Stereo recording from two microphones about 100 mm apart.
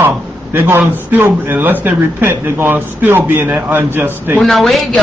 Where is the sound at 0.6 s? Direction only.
20° right (ahead or behind).